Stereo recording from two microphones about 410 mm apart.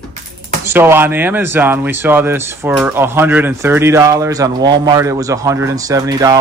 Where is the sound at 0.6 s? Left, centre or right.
Centre.